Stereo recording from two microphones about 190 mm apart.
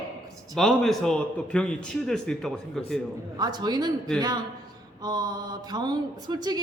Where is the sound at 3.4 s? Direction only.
20° right (ahead or behind).